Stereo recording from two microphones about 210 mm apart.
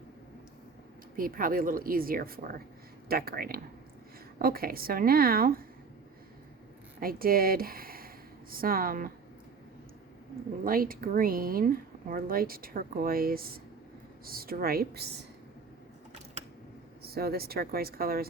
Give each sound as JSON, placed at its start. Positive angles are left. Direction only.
{"t": 1.1, "sound": "a woman's voice", "side_deg": -40}
{"t": 7.0, "sound": "speech", "side_deg": -45}
{"t": 10.6, "sound": "a woman's voice", "side_deg": -45}
{"t": 17.0, "sound": "a woman's voice", "side_deg": -45}